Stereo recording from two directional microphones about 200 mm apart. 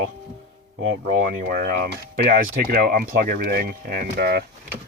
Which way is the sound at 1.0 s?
40° right (ahead or behind).